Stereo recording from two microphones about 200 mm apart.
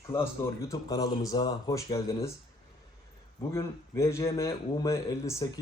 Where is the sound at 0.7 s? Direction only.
15° left (ahead or behind).